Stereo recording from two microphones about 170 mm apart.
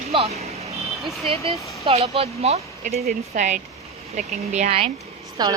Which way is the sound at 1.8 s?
35° right (ahead or behind).